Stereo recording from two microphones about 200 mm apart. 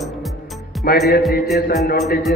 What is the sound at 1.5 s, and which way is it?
Music, 50° left (ahead or behind).